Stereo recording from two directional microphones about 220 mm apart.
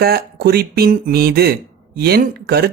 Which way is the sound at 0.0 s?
45° right (ahead or behind).